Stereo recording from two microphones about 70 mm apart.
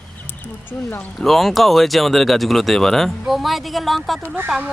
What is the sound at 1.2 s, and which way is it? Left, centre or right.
Speech, centre.